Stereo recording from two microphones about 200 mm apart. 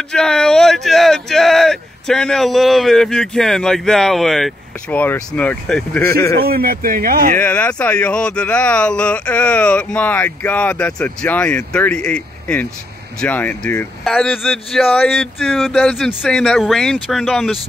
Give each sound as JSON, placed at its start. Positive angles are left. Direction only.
{"t": 0.1, "sound": "speech", "side_deg": 5}
{"t": 6.4, "sound": "speech", "side_deg": -50}
{"t": 7.3, "sound": "speech", "side_deg": 5}